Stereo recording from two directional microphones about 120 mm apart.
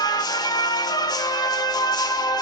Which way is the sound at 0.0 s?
35° left (ahead or behind).